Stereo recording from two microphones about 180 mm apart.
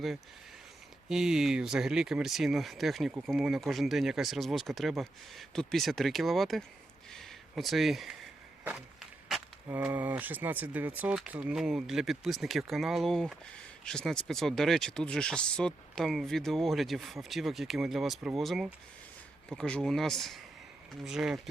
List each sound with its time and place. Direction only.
1.0 s speech: 5° right (ahead or behind)
7.1 s a sound: centre (ahead or behind)
9.6 s speech: 10° right (ahead or behind)